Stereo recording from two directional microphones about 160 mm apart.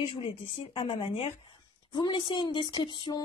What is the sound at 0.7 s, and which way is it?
A woman's voice, 30° left (ahead or behind).